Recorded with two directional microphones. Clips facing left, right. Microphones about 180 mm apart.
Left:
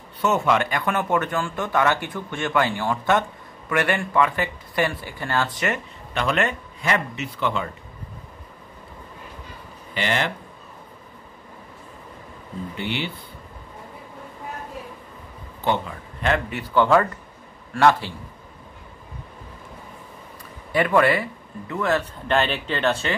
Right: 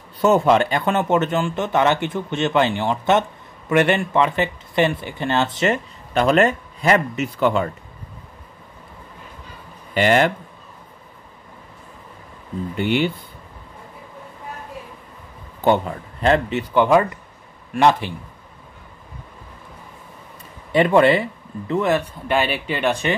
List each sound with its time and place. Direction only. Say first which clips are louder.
0.2 s speech: right 6 dB; 35° right (ahead or behind)
6.1 s speech: right 7 dB; 35° right (ahead or behind)
9.9 s speech: right 8 dB; 45° right (ahead or behind)
12.7 s speech: right 9 dB; 50° right (ahead or behind)
15.6 s speech: right 6 dB; 45° right (ahead or behind)
16.2 s speech: right 6 dB; 30° right (ahead or behind)
20.7 s speech: right 4 dB; 25° right (ahead or behind)